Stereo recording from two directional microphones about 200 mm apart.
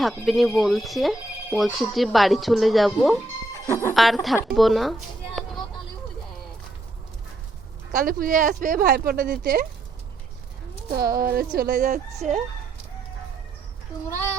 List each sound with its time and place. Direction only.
0.0 s speech: centre (ahead or behind)
3.7 s speech: 15° left (ahead or behind)
3.9 s speech: centre (ahead or behind)
4.4 s a sound: centre (ahead or behind)
7.9 s speech: 45° right (ahead or behind)
10.9 s speech: 45° right (ahead or behind)